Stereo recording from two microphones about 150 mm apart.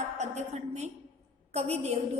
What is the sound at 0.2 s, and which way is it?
A woman's voice, 50° right (ahead or behind).